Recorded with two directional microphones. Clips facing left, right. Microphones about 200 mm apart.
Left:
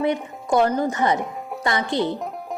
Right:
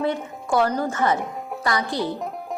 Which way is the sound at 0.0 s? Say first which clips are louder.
Left 2 dB; 20° left (ahead or behind).